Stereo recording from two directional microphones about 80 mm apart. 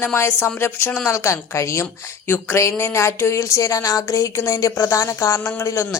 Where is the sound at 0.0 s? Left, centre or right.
Left.